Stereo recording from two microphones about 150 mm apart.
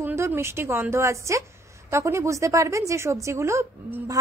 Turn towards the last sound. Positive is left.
turn(degrees=-15)  # may be behind; listen again after turning